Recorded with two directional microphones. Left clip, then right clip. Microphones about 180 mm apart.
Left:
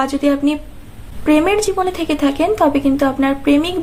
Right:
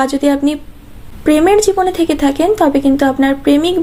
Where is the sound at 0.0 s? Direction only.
25° right (ahead or behind).